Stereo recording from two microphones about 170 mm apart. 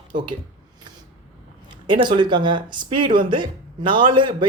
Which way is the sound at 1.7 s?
30° right (ahead or behind).